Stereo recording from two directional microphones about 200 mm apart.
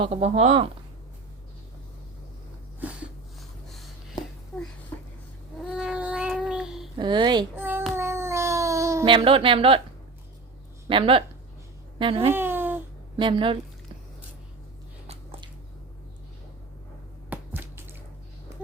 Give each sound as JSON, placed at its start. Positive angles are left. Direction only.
{"t": 0.0, "sound": "speech", "side_deg": -30}
{"t": 5.7, "sound": "child singing", "side_deg": -5}
{"t": 6.9, "sound": "a child's voice", "side_deg": -25}
{"t": 7.5, "sound": "child singing", "side_deg": -10}
{"t": 7.9, "sound": "cat", "side_deg": -15}
{"t": 10.8, "sound": "a child's voice", "side_deg": -25}
{"t": 12.3, "sound": "a sound", "side_deg": -10}
{"t": 13.1, "sound": "a child's voice", "side_deg": -25}
{"t": 15.0, "sound": "a sound", "side_deg": -30}
{"t": 17.2, "sound": "finger snapping", "side_deg": -10}